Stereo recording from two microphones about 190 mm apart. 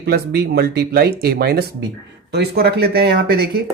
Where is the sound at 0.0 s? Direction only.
60° right (ahead or behind).